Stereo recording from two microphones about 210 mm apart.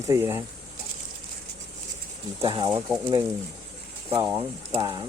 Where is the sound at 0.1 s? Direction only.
15° right (ahead or behind).